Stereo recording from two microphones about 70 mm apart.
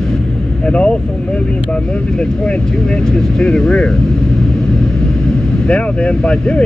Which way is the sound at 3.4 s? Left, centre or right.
Centre.